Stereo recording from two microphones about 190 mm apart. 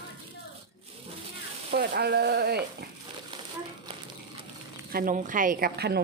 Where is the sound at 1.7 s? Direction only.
60° right (ahead or behind).